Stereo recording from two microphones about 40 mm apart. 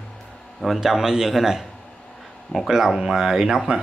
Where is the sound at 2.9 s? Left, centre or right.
Centre.